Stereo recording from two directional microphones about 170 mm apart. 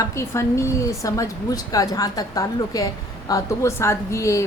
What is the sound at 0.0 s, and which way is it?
A woman's voice, 15° left (ahead or behind).